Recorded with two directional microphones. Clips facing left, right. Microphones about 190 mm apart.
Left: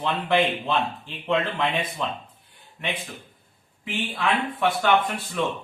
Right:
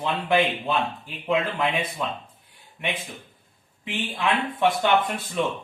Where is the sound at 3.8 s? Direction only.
20° right (ahead or behind).